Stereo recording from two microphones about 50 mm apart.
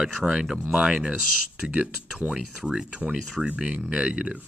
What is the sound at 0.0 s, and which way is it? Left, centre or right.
Speech, centre.